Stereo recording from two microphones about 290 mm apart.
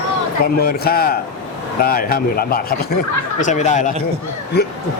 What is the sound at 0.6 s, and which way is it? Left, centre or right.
A man's voice, left.